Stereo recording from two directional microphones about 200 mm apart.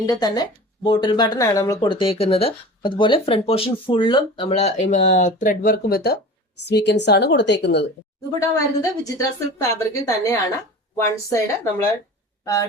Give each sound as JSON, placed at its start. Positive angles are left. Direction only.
{"t": 0.0, "sound": "a woman's voice", "side_deg": 20}
{"t": 8.3, "sound": "speech", "side_deg": 15}